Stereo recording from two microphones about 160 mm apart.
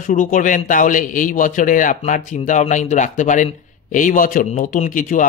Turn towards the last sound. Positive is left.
turn(degrees=55)  # may be behind; listen again after turning